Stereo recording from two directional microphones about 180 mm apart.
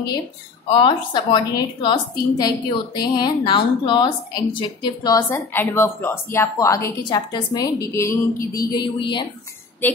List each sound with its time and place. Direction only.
0.7 s a woman's voice: 25° left (ahead or behind)
9.8 s a woman's voice: 10° left (ahead or behind)